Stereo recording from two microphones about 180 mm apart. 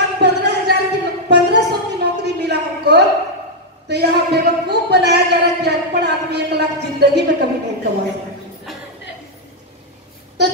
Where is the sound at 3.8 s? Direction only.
65° right (ahead or behind).